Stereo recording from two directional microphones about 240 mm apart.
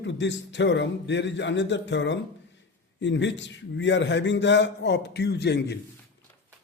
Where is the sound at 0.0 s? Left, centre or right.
Left.